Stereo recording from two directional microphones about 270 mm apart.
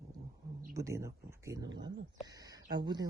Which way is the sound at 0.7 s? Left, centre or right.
Centre.